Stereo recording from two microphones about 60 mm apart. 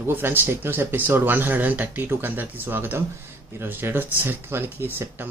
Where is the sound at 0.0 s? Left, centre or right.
Right.